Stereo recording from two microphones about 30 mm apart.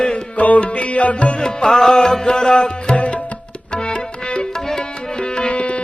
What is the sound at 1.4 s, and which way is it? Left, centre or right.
Music, left.